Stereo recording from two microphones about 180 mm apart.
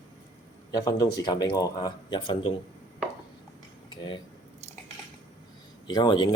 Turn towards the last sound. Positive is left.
turn(degrees=25)  # may be behind; listen again after turning